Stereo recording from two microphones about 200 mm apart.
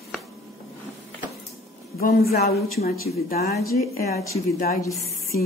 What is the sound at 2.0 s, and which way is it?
Speech, 50° left (ahead or behind).